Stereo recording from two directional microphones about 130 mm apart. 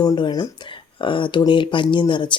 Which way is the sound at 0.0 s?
30° left (ahead or behind).